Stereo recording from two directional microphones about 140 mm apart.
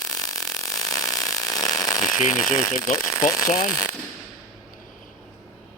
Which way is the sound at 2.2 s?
55° left (ahead or behind).